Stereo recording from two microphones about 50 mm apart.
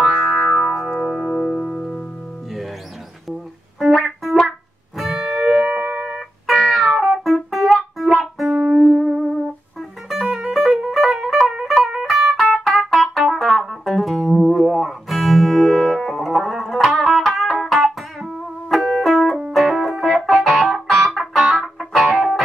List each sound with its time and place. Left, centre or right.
0.0 s music: centre
3.9 s music: centre
4.9 s music: centre
5.9 s music: centre
8.9 s music: centre